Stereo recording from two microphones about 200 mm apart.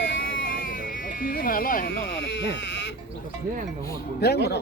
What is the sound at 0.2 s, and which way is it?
Sheep, 45° left (ahead or behind).